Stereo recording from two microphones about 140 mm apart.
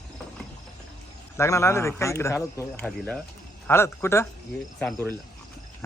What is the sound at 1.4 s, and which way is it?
Speech, 20° left (ahead or behind).